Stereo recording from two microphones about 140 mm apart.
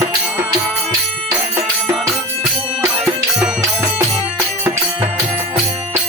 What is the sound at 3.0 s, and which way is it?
Music, 5° right (ahead or behind).